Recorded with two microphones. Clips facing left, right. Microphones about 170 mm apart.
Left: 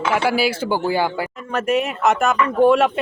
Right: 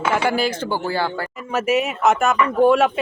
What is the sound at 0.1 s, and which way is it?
Speech, 5° left (ahead or behind).